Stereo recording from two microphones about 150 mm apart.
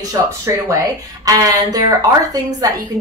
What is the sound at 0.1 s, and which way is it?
A woman's voice, 20° right (ahead or behind).